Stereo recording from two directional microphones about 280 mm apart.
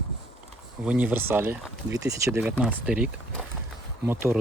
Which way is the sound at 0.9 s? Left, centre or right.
Centre.